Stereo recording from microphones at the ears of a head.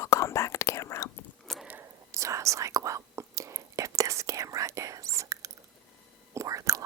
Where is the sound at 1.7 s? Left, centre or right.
Right.